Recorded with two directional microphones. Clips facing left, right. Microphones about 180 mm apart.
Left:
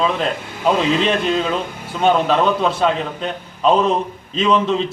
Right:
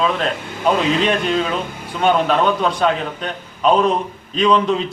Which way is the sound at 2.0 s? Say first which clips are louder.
Even; centre (ahead or behind).